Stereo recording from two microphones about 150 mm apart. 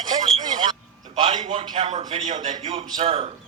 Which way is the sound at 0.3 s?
40° right (ahead or behind).